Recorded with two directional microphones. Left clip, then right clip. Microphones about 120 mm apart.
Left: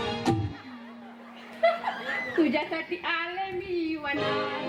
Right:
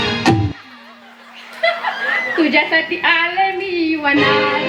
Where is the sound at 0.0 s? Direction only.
25° right (ahead or behind).